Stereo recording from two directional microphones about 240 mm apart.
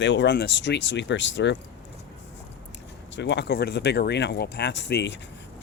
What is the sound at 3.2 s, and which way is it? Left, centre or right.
Speech, left.